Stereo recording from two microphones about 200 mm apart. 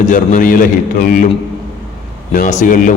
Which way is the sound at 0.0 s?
40° left (ahead or behind).